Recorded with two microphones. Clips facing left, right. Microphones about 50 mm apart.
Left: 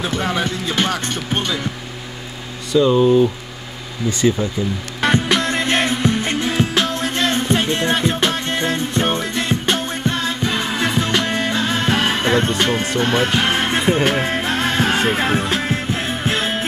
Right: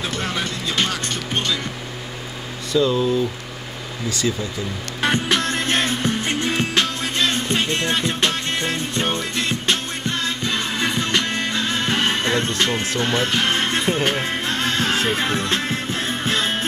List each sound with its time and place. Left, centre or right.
0.0 s music: centre
2.7 s speech: centre
4.1 s speech: left
5.1 s music: centre
7.2 s music: left